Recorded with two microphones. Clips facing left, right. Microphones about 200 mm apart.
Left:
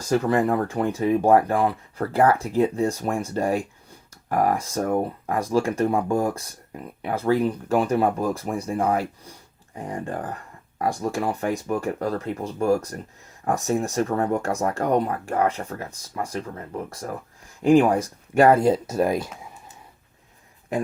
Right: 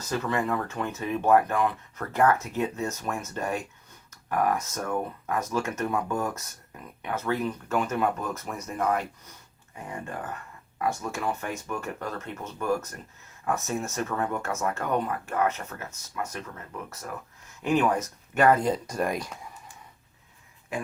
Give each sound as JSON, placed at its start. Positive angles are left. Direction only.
{"t": 0.1, "sound": "speech", "side_deg": 40}